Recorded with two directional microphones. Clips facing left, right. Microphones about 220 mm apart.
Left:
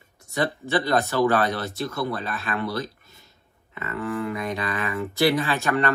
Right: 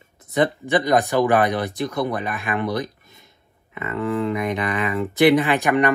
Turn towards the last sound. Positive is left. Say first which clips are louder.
# right 5 dB
turn(degrees=-15)  # may be behind; listen again after turning